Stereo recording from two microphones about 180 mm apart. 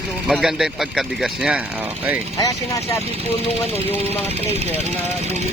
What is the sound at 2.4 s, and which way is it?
Speech, 20° left (ahead or behind).